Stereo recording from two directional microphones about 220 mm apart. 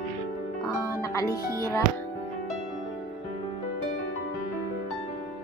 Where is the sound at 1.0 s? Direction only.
15° left (ahead or behind).